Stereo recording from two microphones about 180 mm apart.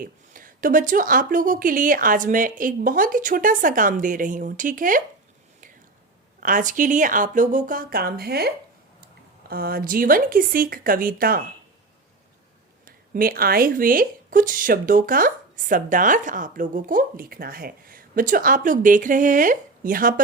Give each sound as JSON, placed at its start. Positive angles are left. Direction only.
{"t": 0.0, "sound": "speech", "side_deg": -50}
{"t": 6.4, "sound": "speech", "side_deg": -45}
{"t": 12.8, "sound": "speech", "side_deg": -55}